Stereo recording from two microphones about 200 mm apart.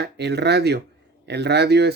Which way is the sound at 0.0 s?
55° right (ahead or behind).